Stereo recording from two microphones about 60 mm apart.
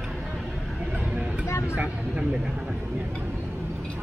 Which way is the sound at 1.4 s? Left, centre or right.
Left.